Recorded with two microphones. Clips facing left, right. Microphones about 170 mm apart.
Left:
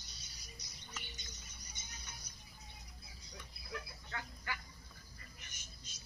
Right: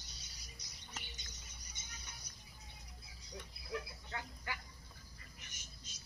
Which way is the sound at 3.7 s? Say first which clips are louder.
Right 3 dB; 20° right (ahead or behind).